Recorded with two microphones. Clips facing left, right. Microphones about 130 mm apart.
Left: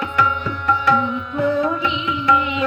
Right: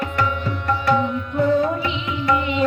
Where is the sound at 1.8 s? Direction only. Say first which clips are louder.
Left 2 dB; 40° right (ahead or behind).